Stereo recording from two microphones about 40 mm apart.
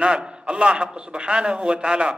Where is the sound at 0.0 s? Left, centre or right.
Right.